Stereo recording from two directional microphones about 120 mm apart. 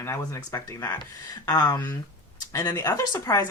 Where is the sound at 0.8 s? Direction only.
35° left (ahead or behind).